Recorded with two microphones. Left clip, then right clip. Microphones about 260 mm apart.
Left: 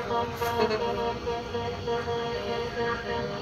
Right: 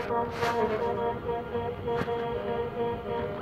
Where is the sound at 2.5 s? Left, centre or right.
Left.